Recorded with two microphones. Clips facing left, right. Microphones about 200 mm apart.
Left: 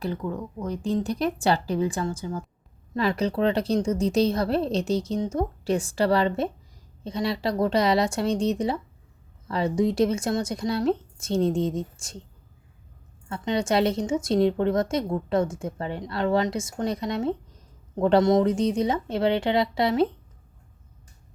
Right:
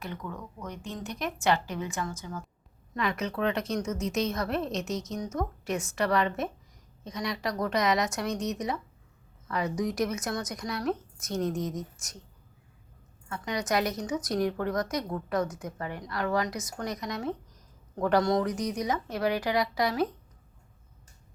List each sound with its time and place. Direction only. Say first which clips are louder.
0.0 s a woman's voice: left 9 dB; 30° left (ahead or behind)
13.2 s a woman's voice: left 6 dB; 25° left (ahead or behind)